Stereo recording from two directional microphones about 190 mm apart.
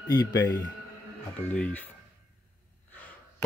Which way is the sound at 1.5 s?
5° left (ahead or behind).